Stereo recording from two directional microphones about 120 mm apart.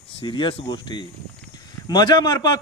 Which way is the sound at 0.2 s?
40° left (ahead or behind).